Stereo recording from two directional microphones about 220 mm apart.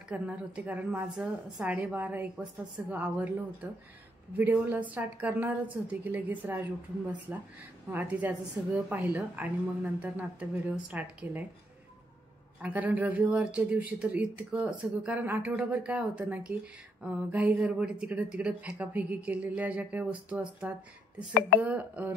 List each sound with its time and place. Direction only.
0.1 s speech: 5° right (ahead or behind)
12.6 s speech: 5° right (ahead or behind)
21.3 s speech: 40° left (ahead or behind)
21.5 s speech: 10° right (ahead or behind)